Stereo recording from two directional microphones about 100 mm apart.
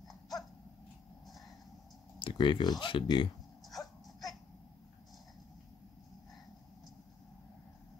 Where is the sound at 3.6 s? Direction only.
Centre (ahead or behind).